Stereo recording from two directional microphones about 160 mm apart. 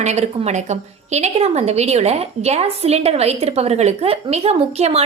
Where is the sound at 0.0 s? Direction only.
45° right (ahead or behind).